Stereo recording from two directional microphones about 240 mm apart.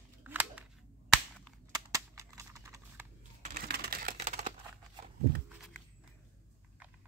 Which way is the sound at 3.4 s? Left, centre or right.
Right.